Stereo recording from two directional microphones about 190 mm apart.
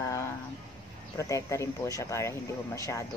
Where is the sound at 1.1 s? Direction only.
15° left (ahead or behind).